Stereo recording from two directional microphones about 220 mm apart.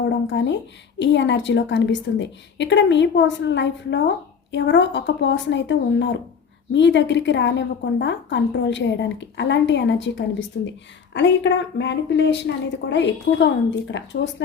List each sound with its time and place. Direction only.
0.3 s speech: 55° left (ahead or behind)